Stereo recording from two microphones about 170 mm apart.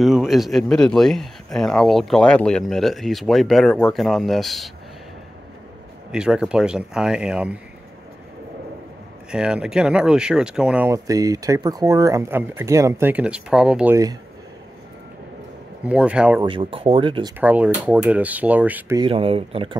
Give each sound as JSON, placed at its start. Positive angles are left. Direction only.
{"t": 0.0, "sound": "speech", "side_deg": 0}
{"t": 6.1, "sound": "speech", "side_deg": -5}
{"t": 9.3, "sound": "speech", "side_deg": -5}
{"t": 11.1, "sound": "speech", "side_deg": -20}
{"t": 15.8, "sound": "speech", "side_deg": -5}
{"t": 16.4, "sound": "speech", "side_deg": -30}
{"t": 17.4, "sound": "speech", "side_deg": -10}
{"t": 18.9, "sound": "speech", "side_deg": -30}